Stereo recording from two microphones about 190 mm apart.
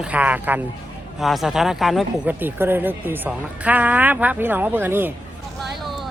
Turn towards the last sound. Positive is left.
turn(degrees=-10)  # may be behind; listen again after turning